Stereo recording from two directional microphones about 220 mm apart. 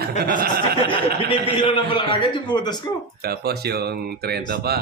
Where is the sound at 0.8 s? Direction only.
25° left (ahead or behind).